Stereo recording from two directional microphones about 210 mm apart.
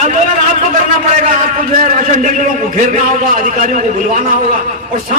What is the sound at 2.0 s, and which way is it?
A man's voice, 35° right (ahead or behind).